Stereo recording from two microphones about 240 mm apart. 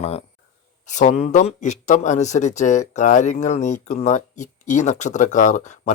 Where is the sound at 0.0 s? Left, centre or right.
Left.